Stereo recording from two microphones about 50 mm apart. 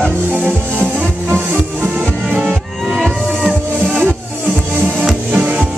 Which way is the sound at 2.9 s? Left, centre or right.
Centre.